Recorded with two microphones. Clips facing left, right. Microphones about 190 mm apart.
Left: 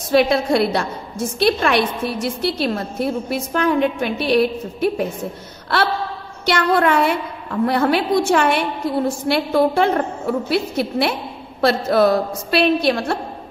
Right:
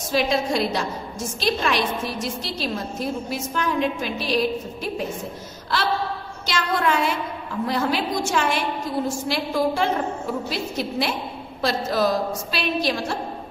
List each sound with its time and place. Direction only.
0.1 s a woman's voice: 60° left (ahead or behind)
6.4 s a woman's voice: 60° left (ahead or behind)